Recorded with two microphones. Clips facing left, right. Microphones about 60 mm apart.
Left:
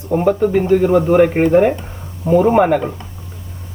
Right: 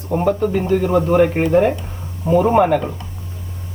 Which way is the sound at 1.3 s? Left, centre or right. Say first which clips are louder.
Left 3 dB; left.